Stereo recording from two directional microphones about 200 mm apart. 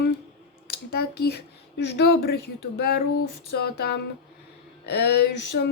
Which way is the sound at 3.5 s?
55° left (ahead or behind).